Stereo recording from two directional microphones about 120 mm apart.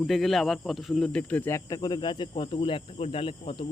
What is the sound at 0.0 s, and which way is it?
Speech, centre (ahead or behind).